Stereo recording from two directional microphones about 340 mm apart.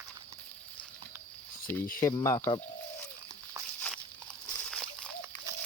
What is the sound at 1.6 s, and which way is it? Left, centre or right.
Speech, centre.